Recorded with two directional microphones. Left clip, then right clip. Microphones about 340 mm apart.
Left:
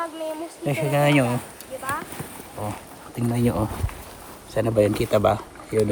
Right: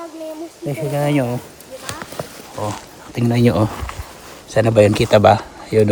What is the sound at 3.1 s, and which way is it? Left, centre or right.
Speech, right.